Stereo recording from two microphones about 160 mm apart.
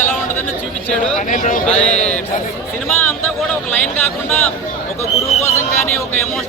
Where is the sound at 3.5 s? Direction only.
10° left (ahead or behind).